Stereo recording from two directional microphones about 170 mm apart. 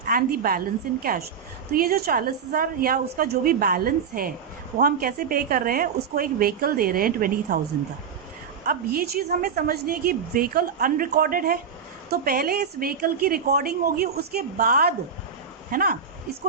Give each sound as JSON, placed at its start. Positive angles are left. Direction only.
{"t": 0.0, "sound": "a woman's voice", "side_deg": -60}
{"t": 8.6, "sound": "a woman's voice", "side_deg": -60}